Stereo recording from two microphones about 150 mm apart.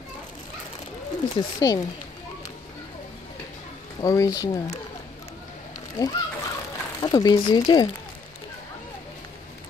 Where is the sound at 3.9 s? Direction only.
25° left (ahead or behind).